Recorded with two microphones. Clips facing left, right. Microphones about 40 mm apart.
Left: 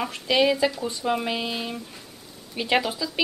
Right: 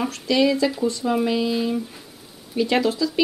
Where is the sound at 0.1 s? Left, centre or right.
Left.